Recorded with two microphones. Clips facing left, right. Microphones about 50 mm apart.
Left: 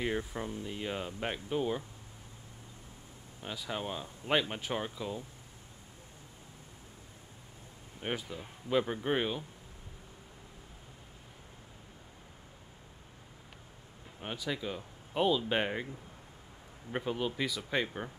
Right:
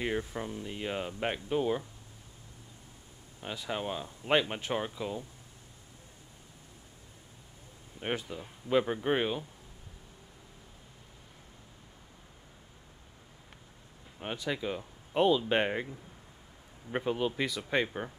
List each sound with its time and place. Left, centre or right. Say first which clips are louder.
0.0 s speech: right 1 dB; centre
3.4 s speech: right 2 dB; centre
8.2 s speech: right 1 dB; centre
14.2 s speech: right 3 dB; centre
16.9 s speech: right 3 dB; centre